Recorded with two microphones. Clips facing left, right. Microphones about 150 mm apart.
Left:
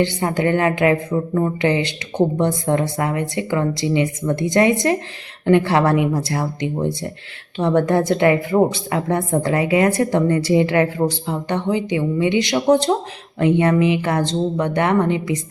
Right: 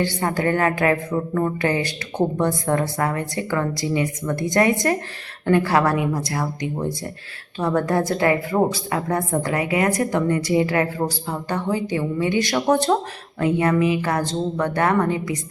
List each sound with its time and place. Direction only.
0.0 s a woman's voice: 20° left (ahead or behind)